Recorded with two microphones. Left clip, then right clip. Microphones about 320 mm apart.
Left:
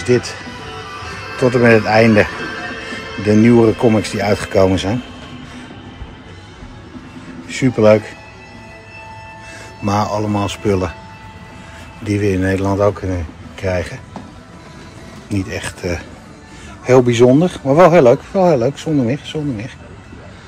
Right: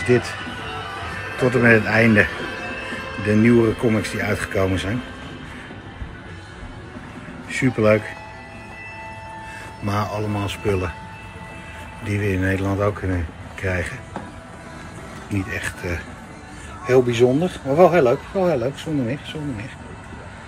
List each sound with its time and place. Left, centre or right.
0.0 s speech: centre
1.3 s speech: centre
7.4 s speech: centre
9.8 s speech: centre
12.1 s speech: centre
15.2 s speech: centre